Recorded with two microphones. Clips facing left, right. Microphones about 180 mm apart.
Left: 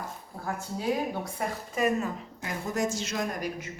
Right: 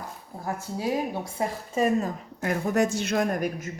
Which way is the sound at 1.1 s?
25° right (ahead or behind).